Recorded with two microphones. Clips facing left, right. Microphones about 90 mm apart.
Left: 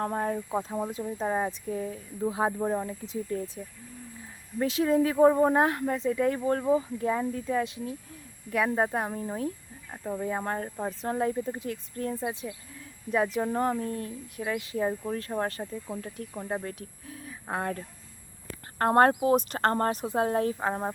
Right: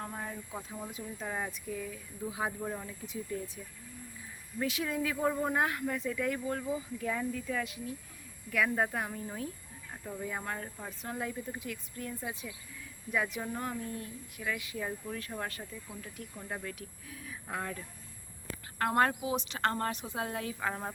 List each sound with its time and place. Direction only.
0.0 s speech: 45° left (ahead or behind)
0.9 s speech: 35° left (ahead or behind)
4.6 s speech: 35° left (ahead or behind)
7.0 s speech: 30° left (ahead or behind)
19.2 s speech: 50° left (ahead or behind); by 20.9 s 30° left (ahead or behind)